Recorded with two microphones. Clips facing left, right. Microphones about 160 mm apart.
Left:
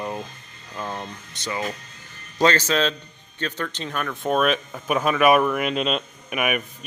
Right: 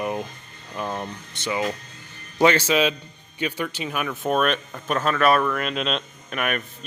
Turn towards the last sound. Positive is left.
turn(degrees=10)  # may be behind; listen again after turning